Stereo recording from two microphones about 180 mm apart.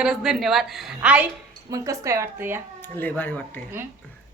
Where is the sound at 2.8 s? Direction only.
10° left (ahead or behind).